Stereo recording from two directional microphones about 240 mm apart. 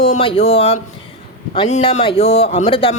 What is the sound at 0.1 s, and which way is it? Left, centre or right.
Speech, left.